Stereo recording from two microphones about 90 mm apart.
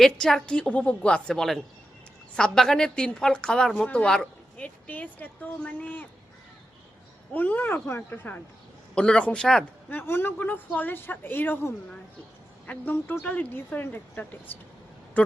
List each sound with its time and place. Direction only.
0.0 s a woman's voice: 5° left (ahead or behind)
7.3 s a woman's voice: 20° left (ahead or behind)
9.0 s a woman's voice: 10° left (ahead or behind)
9.9 s speech: 25° left (ahead or behind)